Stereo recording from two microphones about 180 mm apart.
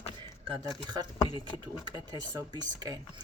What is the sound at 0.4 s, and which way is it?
Speech, 20° right (ahead or behind).